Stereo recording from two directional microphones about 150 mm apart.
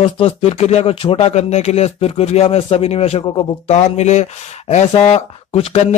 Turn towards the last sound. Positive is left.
turn(degrees=45)  # may be behind; listen again after turning